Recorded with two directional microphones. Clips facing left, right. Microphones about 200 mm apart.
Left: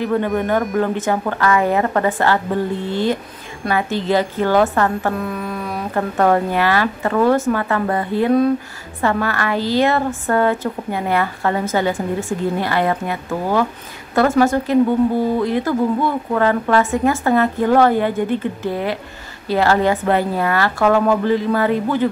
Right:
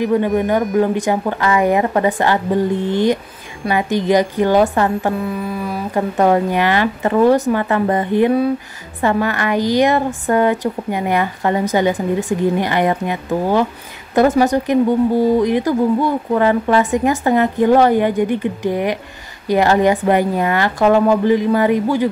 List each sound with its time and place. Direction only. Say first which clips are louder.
0.0 s speech: right 3 dB; 15° right (ahead or behind)
5.2 s mantra: right 2 dB; 5° right (ahead or behind)
5.9 s speech: right 2 dB; 15° right (ahead or behind)